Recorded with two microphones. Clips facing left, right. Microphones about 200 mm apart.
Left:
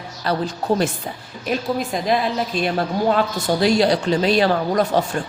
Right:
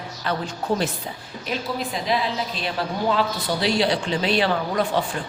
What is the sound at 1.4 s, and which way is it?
Speech, 50° left (ahead or behind).